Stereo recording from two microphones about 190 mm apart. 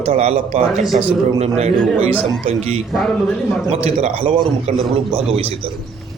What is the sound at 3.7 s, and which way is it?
A man's voice, 35° right (ahead or behind).